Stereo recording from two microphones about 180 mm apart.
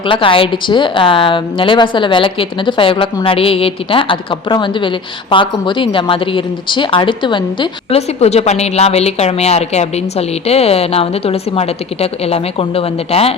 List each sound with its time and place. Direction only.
0.1 s a woman's voice: 30° left (ahead or behind)